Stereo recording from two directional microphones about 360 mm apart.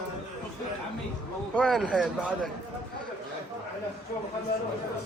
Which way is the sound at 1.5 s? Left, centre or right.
Centre.